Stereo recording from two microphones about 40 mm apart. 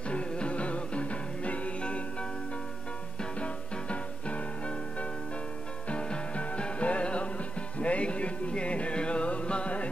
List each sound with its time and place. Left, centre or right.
0.1 s music: left
3.2 s music: left
5.9 s music: left